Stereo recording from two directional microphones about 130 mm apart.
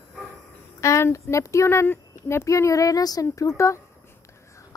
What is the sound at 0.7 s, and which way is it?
Speech, 20° left (ahead or behind).